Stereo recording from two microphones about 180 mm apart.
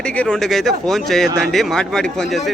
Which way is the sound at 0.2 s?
5° left (ahead or behind).